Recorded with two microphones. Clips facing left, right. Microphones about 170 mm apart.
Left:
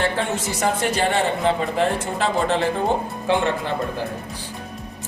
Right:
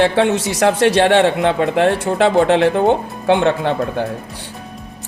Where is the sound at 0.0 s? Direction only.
75° right (ahead or behind).